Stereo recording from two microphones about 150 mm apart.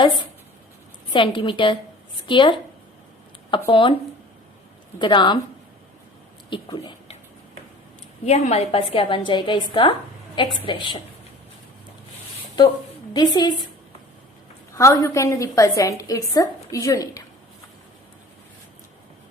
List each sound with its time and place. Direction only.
1.1 s a woman's voice: 35° left (ahead or behind)
3.7 s a woman's voice: 35° left (ahead or behind)
4.9 s a woman's voice: 30° left (ahead or behind)
6.5 s speech: 30° left (ahead or behind)
8.2 s a woman's voice: 45° left (ahead or behind)
13.1 s a woman's voice: 25° left (ahead or behind)
14.7 s a woman's voice: 20° left (ahead or behind)